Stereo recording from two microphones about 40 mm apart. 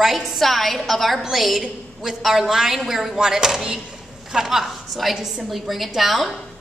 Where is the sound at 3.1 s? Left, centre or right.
Centre.